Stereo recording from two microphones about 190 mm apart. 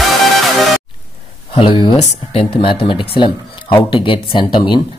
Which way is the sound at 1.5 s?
25° left (ahead or behind).